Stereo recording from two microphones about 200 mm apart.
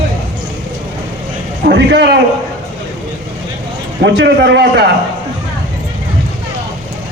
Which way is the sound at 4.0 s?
60° right (ahead or behind).